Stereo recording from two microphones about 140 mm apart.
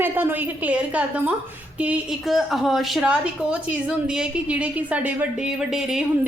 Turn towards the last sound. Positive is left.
turn(degrees=-5)  # may be behind; listen again after turning